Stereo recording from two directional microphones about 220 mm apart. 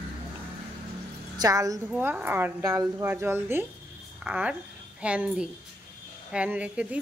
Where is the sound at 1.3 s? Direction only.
15° right (ahead or behind).